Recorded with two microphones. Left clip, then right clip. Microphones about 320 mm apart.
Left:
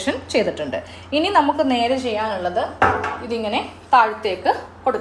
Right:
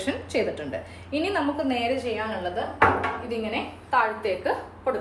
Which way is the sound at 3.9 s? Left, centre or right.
Left.